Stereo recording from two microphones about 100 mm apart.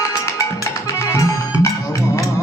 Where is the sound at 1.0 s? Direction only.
30° left (ahead or behind).